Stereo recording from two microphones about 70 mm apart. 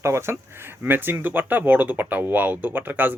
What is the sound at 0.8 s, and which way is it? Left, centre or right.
Speech, right.